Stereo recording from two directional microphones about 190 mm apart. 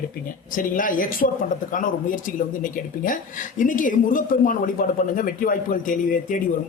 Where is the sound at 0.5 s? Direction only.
45° left (ahead or behind).